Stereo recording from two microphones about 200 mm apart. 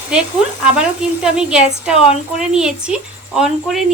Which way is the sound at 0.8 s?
5° right (ahead or behind).